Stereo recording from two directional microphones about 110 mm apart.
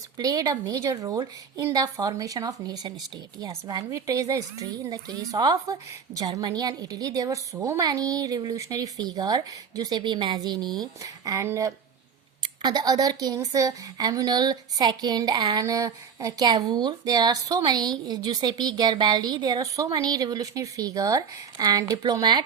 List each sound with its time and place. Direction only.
0.2 s a woman's voice: 35° right (ahead or behind)
12.4 s a woman's voice: 40° right (ahead or behind)